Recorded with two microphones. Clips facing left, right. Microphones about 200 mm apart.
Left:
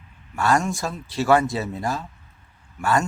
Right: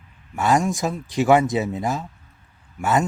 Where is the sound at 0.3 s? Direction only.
20° right (ahead or behind).